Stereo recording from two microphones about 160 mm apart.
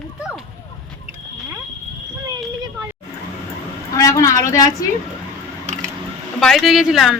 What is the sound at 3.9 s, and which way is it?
Speech, 20° left (ahead or behind).